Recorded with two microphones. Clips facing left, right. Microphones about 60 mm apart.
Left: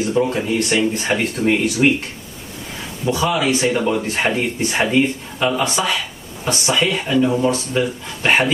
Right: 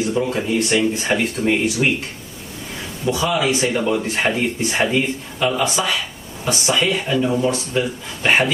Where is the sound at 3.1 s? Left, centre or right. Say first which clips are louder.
Left 1 dB; centre.